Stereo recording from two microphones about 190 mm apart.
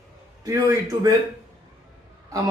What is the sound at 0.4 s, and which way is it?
Speech, 20° right (ahead or behind).